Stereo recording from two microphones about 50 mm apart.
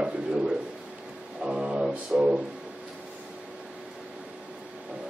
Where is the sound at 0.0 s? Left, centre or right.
Right.